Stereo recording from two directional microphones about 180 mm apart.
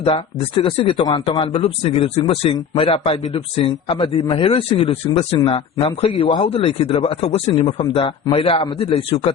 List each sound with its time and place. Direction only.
0.0 s a man's voice: 30° left (ahead or behind)